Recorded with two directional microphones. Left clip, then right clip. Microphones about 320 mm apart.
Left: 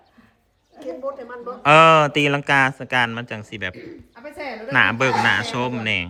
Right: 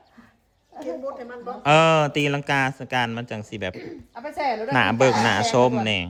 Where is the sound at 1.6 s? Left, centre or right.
Centre.